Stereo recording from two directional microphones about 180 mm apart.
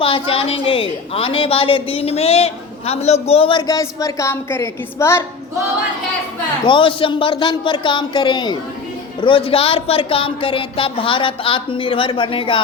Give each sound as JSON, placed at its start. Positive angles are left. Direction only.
{"t": 0.0, "sound": "a woman's voice", "side_deg": 30}
{"t": 6.7, "sound": "speech", "side_deg": 30}